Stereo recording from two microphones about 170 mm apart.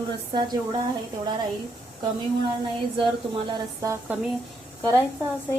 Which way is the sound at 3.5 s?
20° right (ahead or behind).